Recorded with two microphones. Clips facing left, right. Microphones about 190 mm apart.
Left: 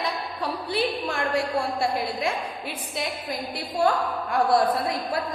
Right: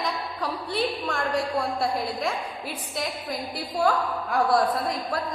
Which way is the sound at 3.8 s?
Centre (ahead or behind).